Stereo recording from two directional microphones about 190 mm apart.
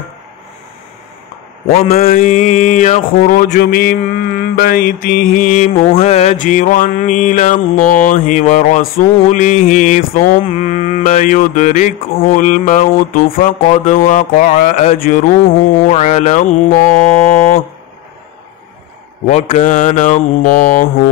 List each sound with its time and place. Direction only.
1.7 s mantra: 50° left (ahead or behind)
19.2 s mantra: 40° left (ahead or behind)